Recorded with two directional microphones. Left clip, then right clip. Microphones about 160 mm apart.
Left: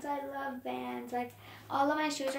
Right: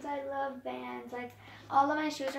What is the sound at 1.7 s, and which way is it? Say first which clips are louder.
Speech: right 2 dB; 20° left (ahead or behind).